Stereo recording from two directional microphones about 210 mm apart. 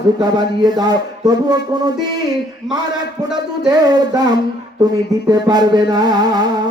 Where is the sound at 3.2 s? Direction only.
20° right (ahead or behind).